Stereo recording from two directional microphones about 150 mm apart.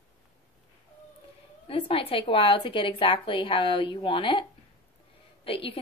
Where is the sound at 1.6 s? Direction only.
40° left (ahead or behind).